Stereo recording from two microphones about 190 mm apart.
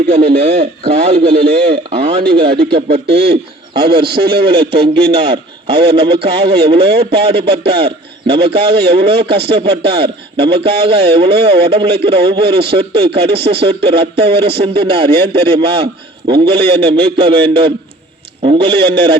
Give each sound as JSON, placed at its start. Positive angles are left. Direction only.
{"t": 0.6, "sound": "a man's voice", "side_deg": -30}